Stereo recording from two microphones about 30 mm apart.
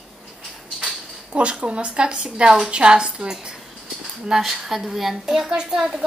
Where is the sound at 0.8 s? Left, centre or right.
Right.